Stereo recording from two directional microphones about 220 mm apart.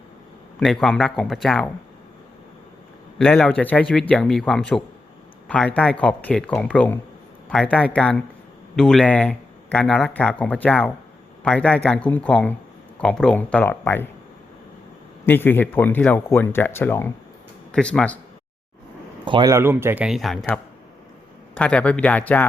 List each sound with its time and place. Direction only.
0.6 s speech: centre (ahead or behind)
3.2 s speech: 5° left (ahead or behind)
15.3 s speech: 10° left (ahead or behind)
19.2 s speech: 20° right (ahead or behind); by 22.4 s 5° left (ahead or behind)